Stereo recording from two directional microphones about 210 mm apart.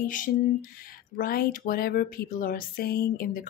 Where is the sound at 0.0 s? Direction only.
40° left (ahead or behind).